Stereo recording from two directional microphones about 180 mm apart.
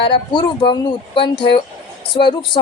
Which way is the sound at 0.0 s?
30° left (ahead or behind).